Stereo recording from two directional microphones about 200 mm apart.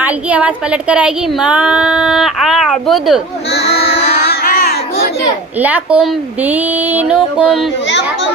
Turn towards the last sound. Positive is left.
turn(degrees=-5)  # may be behind; listen again after turning